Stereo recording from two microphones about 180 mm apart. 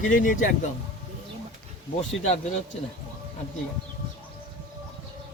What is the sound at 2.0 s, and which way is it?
Speech, 35° left (ahead or behind).